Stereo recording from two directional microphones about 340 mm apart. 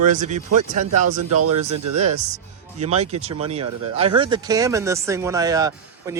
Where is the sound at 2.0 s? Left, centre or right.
Centre.